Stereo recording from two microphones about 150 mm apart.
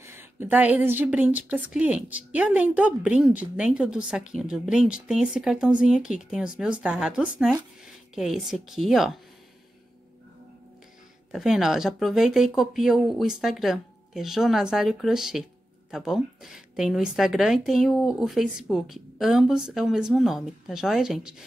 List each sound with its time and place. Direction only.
0.0 s a woman's voice: 15° right (ahead or behind)
11.3 s speech: centre (ahead or behind)